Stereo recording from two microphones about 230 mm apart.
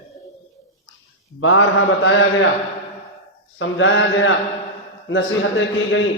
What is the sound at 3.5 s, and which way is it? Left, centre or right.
Speech, left.